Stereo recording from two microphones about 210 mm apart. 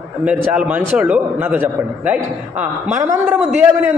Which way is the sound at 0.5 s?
5° right (ahead or behind).